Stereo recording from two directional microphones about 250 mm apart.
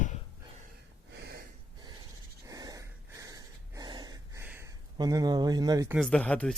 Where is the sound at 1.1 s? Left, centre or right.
Right.